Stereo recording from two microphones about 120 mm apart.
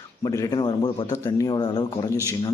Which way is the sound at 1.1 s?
25° left (ahead or behind).